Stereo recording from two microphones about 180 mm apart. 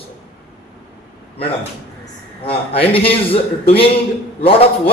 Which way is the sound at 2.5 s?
30° left (ahead or behind).